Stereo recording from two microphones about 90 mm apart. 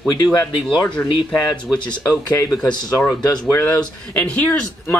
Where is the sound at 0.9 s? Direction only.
10° left (ahead or behind).